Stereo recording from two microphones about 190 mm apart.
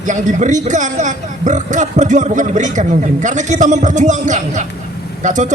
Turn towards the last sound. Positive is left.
turn(degrees=-40)  # may be behind; listen again after turning